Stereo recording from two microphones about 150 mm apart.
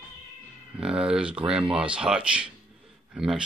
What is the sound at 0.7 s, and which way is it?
Speech, 5° right (ahead or behind).